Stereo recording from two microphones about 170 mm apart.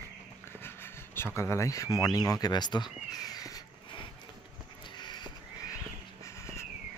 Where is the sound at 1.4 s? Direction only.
15° left (ahead or behind).